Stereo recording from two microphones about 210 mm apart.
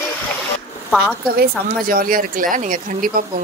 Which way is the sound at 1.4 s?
45° right (ahead or behind).